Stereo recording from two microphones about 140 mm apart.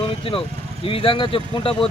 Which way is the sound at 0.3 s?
40° left (ahead or behind).